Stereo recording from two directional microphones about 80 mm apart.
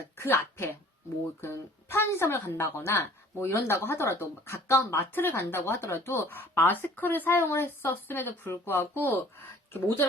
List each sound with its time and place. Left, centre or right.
0.2 s speech: left